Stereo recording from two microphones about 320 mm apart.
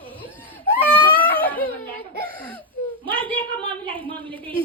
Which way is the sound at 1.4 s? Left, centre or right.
Centre.